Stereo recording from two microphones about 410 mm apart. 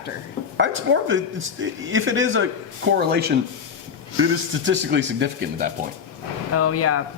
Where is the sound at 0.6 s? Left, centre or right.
Right.